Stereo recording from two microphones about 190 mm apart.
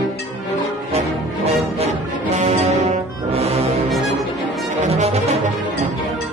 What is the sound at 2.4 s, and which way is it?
Music, 35° right (ahead or behind).